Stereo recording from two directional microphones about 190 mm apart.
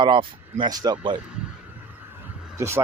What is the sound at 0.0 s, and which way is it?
Speech, 25° right (ahead or behind).